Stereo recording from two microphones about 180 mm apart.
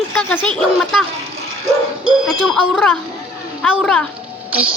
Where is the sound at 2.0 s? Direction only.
Centre (ahead or behind).